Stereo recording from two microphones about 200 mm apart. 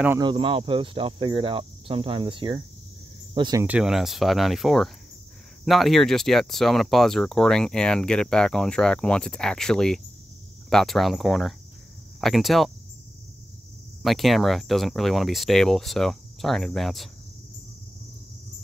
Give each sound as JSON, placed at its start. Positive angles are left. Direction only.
{"t": 0.2, "sound": "speech", "side_deg": -25}
{"t": 3.6, "sound": "speech", "side_deg": -5}
{"t": 14.0, "sound": "speech", "side_deg": 0}